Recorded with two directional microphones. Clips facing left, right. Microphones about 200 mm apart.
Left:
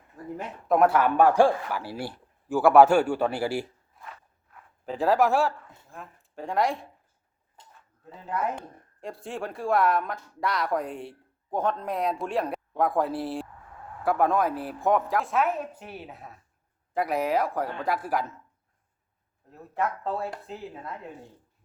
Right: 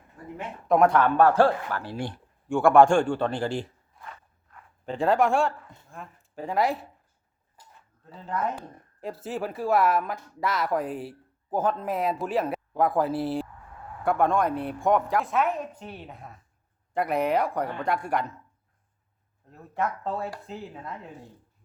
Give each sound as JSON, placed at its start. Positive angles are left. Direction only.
{"t": 0.7, "sound": "a man's voice", "side_deg": 5}
{"t": 8.3, "sound": "speech", "side_deg": 5}
{"t": 19.5, "sound": "speech", "side_deg": 0}